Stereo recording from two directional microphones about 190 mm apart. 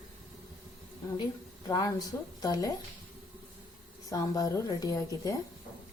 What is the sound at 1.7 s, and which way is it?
Speech, 20° left (ahead or behind).